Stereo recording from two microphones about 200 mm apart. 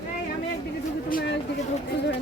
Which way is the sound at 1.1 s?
60° left (ahead or behind).